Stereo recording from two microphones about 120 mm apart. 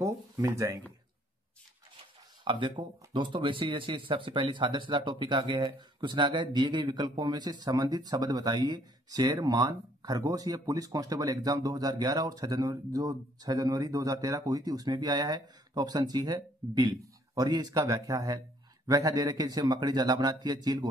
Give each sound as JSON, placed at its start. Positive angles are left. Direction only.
{"t": 0.0, "sound": "speech", "side_deg": -30}
{"t": 2.4, "sound": "speech", "side_deg": -40}